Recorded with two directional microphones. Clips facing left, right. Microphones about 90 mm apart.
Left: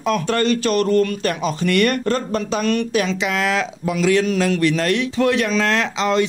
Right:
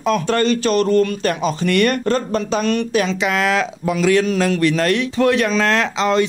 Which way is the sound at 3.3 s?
50° right (ahead or behind).